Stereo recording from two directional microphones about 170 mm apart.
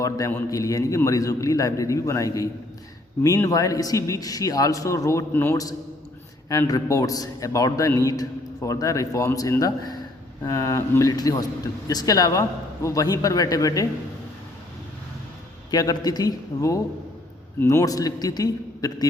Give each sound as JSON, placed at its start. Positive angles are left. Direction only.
{"t": 0.0, "sound": "a man's voice", "side_deg": 15}
{"t": 15.7, "sound": "a man's voice", "side_deg": 20}